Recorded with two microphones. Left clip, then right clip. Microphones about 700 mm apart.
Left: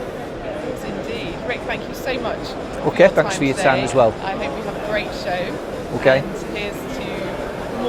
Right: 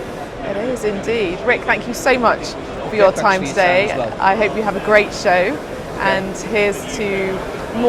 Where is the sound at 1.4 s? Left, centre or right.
Right.